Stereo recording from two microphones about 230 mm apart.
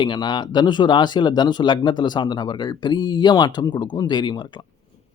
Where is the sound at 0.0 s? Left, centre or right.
Centre.